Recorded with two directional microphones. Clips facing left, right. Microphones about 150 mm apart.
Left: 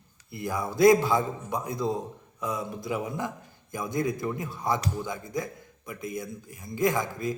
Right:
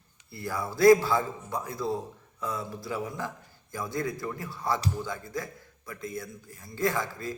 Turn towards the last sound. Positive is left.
turn(degrees=15)  # may be behind; listen again after turning